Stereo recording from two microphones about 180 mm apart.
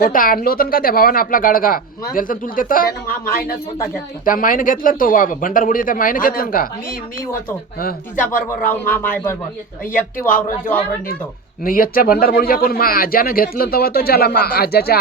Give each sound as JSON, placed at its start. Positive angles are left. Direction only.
{"t": 0.0, "sound": "speech", "side_deg": 50}
{"t": 7.8, "sound": "speech", "side_deg": 50}
{"t": 8.4, "sound": "speech", "side_deg": 10}
{"t": 9.9, "sound": "speech", "side_deg": 50}
{"t": 11.6, "sound": "speech", "side_deg": 50}